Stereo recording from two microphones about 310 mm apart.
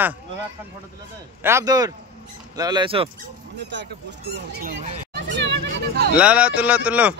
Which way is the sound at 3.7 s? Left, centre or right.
Right.